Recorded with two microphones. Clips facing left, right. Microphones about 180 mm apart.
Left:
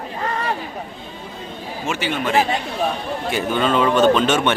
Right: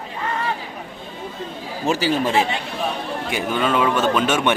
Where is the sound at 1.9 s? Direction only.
35° right (ahead or behind).